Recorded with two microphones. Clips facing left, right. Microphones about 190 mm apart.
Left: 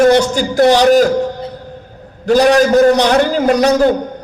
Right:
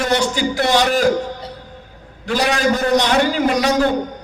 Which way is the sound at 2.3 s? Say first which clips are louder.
Left 8 dB; 45° left (ahead or behind).